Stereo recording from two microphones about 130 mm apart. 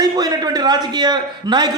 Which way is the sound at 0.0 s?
30° right (ahead or behind).